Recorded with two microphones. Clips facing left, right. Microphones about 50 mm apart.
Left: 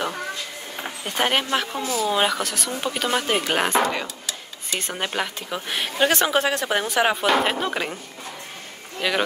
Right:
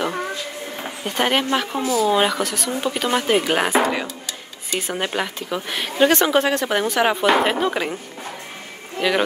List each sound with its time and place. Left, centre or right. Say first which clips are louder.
1.0 s speech: right 3 dB; centre
1.8 s speech: right 5 dB; right
2.0 s speech: right 3 dB; centre